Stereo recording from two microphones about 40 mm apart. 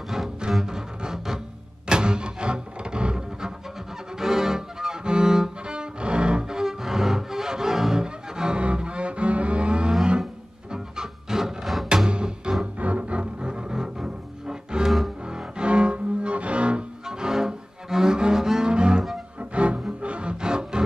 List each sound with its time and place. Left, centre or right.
0.7 s music: centre
4.2 s cello: centre
10.7 s music: centre
12.1 s music: right
12.7 s double bass: right; by 14.9 s centre
14.9 s music: centre
15.2 s cello: right
17.0 s cello: centre
19.5 s music: right